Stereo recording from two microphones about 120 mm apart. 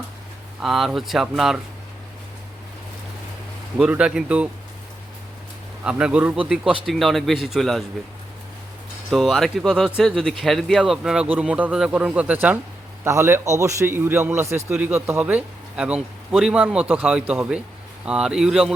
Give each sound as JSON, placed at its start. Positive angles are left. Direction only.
{"t": 0.6, "sound": "speech", "side_deg": 0}
{"t": 3.8, "sound": "a man's voice", "side_deg": -10}
{"t": 5.8, "sound": "a man's voice", "side_deg": -10}
{"t": 9.0, "sound": "a man's voice", "side_deg": 0}